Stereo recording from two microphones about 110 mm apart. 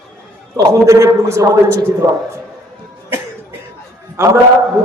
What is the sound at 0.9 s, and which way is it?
Speech, 30° right (ahead or behind).